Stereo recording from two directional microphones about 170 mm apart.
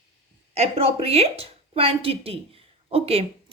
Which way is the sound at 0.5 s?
35° right (ahead or behind).